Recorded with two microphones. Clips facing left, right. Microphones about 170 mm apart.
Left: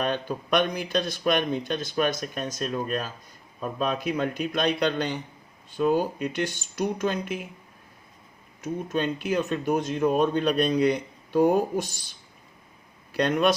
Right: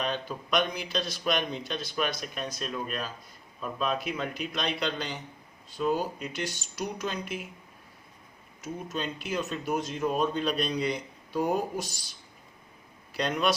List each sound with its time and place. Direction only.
0.0 s speech: 50° left (ahead or behind)
8.6 s speech: 55° left (ahead or behind)
13.2 s speech: 50° left (ahead or behind)